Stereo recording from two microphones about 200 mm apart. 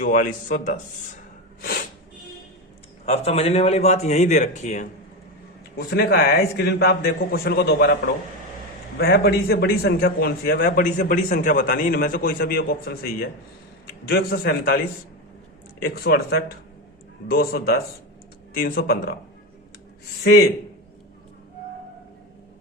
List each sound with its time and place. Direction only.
0.0 s a man's voice: 45° left (ahead or behind)
3.1 s a man's voice: 30° left (ahead or behind)
5.7 s a man's voice: 50° left (ahead or behind)
15.8 s a man's voice: 50° left (ahead or behind)